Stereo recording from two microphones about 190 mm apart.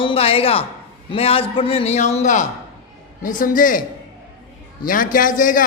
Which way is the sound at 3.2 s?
45° left (ahead or behind).